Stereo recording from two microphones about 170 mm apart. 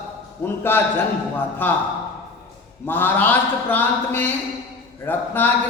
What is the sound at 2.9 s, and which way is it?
A man's voice, 10° left (ahead or behind).